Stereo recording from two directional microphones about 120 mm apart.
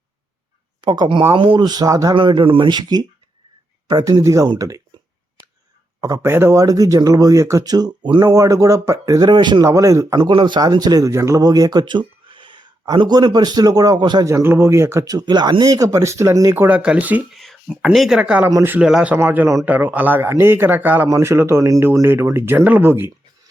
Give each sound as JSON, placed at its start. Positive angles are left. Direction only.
{"t": 0.8, "sound": "speech", "side_deg": -35}
{"t": 2.1, "sound": "speech", "side_deg": -45}
{"t": 6.2, "sound": "speech", "side_deg": -20}
{"t": 9.6, "sound": "speech", "side_deg": -25}
{"t": 14.3, "sound": "speech", "side_deg": -25}
{"t": 16.6, "sound": "speech", "side_deg": -10}
{"t": 17.3, "sound": "speech", "side_deg": 0}
{"t": 18.9, "sound": "speech", "side_deg": -5}
{"t": 19.1, "sound": "speech", "side_deg": -15}